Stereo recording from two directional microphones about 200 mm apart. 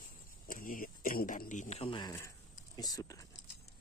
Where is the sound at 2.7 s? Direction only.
20° left (ahead or behind).